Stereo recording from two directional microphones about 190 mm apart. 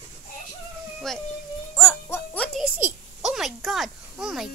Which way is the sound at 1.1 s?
Centre (ahead or behind).